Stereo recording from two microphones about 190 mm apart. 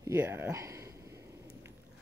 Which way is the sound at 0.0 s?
15° right (ahead or behind).